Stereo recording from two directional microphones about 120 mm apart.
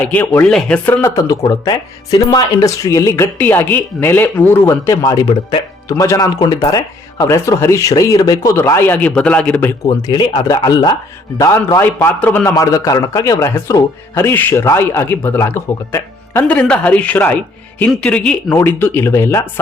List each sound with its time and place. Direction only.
0.0 s speech: 15° left (ahead or behind)
1.0 s speech: 30° left (ahead or behind)
3.3 s speech: 15° left (ahead or behind)
9.8 s speech: 35° left (ahead or behind); by 12.5 s 15° left (ahead or behind)
12.5 s speech: 30° left (ahead or behind); by 18.5 s 5° left (ahead or behind)
18.5 s speech: 15° left (ahead or behind)